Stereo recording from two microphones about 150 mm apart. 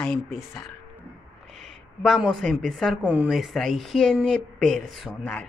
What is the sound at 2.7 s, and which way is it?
A woman's voice, centre (ahead or behind).